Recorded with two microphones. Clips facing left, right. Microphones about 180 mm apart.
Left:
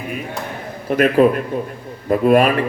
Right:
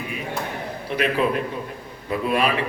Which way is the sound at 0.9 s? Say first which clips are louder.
Left 9 dB; 45° left (ahead or behind).